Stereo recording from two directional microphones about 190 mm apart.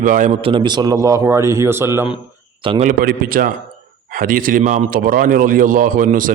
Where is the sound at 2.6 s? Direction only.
30° right (ahead or behind).